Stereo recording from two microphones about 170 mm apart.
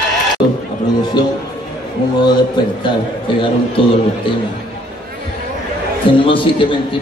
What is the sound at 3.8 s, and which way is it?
Speech, 30° left (ahead or behind).